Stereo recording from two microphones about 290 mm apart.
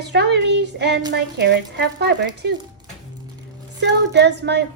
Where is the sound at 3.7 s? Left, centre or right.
Right.